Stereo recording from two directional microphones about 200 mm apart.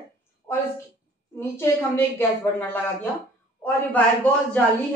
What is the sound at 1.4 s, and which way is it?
A woman's voice, 10° left (ahead or behind).